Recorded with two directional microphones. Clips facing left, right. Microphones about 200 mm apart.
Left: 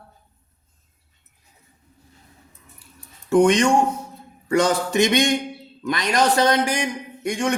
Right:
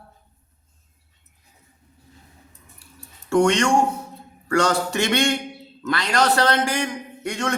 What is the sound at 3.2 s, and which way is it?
A man's voice, 15° left (ahead or behind).